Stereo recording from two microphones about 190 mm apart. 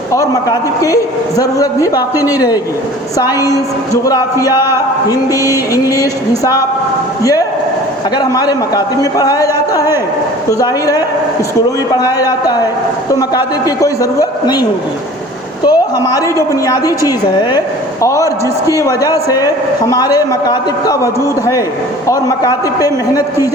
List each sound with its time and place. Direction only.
0.1 s speech: 15° left (ahead or behind)